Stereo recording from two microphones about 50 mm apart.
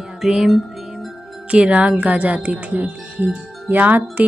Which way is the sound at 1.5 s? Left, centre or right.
Right.